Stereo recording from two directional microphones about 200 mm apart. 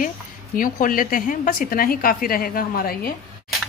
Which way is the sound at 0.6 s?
45° left (ahead or behind).